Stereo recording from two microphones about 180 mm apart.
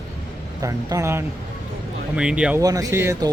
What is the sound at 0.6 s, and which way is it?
Speech, 20° right (ahead or behind).